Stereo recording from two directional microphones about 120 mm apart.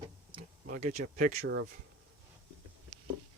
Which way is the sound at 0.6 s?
85° right.